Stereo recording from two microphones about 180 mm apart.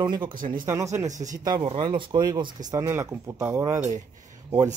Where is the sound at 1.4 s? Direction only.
25° right (ahead or behind).